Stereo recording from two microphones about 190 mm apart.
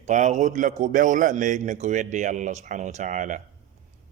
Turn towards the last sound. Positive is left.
turn(degrees=-40)  # may be behind; listen again after turning